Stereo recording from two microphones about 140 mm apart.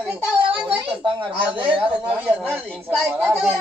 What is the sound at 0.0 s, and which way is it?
Speech, 5° right (ahead or behind).